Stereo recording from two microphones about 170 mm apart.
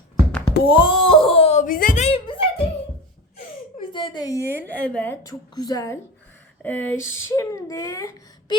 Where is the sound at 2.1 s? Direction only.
30° left (ahead or behind).